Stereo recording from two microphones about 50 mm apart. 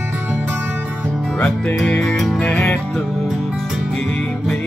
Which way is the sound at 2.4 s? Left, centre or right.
Left.